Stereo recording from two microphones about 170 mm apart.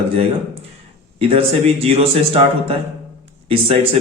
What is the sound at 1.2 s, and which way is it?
A man's voice, 35° right (ahead or behind).